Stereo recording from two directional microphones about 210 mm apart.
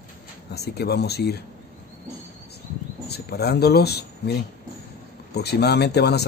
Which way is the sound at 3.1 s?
50° left (ahead or behind).